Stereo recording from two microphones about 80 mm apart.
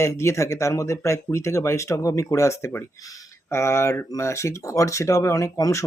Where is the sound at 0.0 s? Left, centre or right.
Left.